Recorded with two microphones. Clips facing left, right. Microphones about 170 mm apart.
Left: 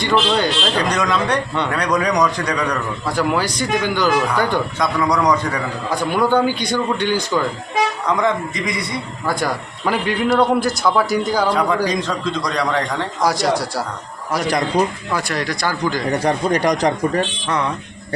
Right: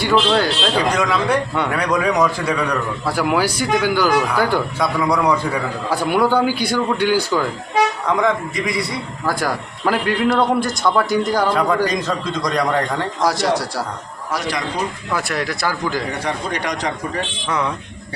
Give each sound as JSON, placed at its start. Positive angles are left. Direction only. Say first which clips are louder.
{"t": 0.0, "sound": "a man's voice", "louder": "right 1 dB", "side_deg": -5}
{"t": 13.2, "sound": "a man's voice", "louder": "left 1 dB", "side_deg": 0}
{"t": 15.1, "sound": "a man's voice", "louder": "even", "side_deg": -5}
{"t": 16.2, "sound": "speech", "louder": "left 6 dB", "side_deg": 40}